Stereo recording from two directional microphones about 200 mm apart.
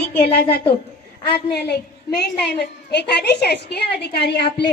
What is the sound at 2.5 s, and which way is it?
A woman's voice, 55° left (ahead or behind).